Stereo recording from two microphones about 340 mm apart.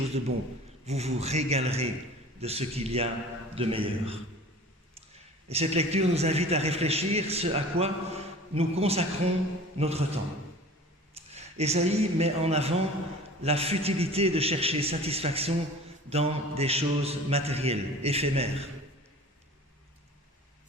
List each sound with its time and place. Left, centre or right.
0.1 s a man's voice: centre
5.5 s a man's voice: centre
11.3 s a man's voice: centre